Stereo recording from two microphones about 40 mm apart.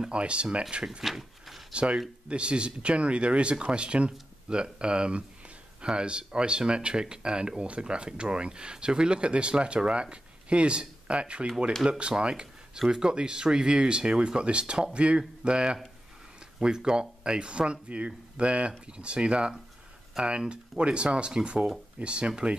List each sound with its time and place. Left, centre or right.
0.1 s speech: right
1.0 s a sound: centre
1.7 s speech: right